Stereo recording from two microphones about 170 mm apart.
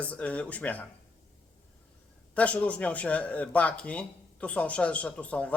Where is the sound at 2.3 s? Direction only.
10° left (ahead or behind).